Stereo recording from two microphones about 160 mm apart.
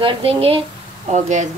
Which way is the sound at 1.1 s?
45° right (ahead or behind).